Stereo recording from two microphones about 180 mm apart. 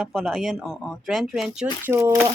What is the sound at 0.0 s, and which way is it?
Speech, 5° right (ahead or behind).